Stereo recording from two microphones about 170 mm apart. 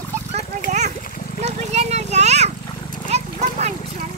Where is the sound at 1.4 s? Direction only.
40° right (ahead or behind).